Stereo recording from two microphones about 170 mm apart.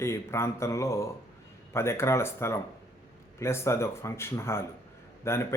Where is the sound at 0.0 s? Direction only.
15° left (ahead or behind).